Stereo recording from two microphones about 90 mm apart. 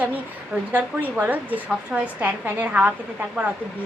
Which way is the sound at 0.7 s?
20° right (ahead or behind).